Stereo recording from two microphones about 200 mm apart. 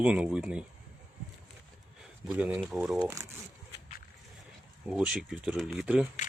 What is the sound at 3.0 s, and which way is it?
Speech, 15° right (ahead or behind).